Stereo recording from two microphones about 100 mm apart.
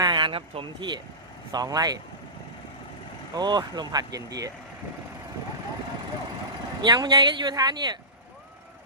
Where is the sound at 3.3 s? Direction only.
45° right (ahead or behind).